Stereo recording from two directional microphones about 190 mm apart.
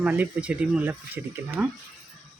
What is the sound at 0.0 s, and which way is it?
Speech, 10° right (ahead or behind).